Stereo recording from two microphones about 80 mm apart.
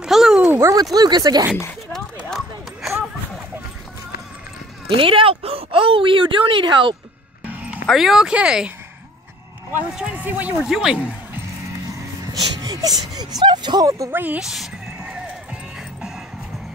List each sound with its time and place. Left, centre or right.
0.0 s a sound: centre
0.6 s speech: right
0.9 s speech: right
1.9 s a sound: centre
4.8 s speech: right
7.4 s music: centre
7.8 s speech: centre
9.9 s speech: centre
10.6 s speech: centre
12.6 s speech: right
14.1 s speech: right
14.4 s music: centre